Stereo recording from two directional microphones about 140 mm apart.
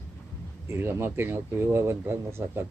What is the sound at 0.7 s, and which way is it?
Speech, 20° right (ahead or behind).